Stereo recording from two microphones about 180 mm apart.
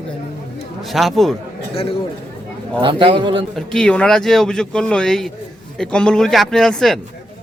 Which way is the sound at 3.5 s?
5° left (ahead or behind).